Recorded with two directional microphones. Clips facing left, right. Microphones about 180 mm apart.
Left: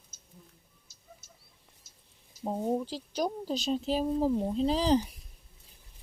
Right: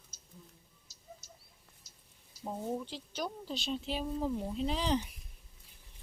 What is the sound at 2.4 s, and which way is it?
Speech, 35° left (ahead or behind).